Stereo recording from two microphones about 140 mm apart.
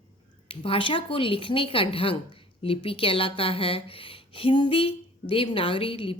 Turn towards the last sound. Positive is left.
turn(degrees=40)  # may be behind; listen again after turning